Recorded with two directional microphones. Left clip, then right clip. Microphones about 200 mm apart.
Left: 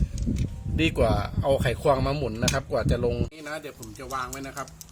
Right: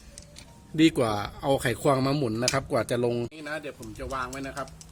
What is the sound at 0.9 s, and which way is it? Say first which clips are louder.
Speech: left 2 dB; 35° right (ahead or behind).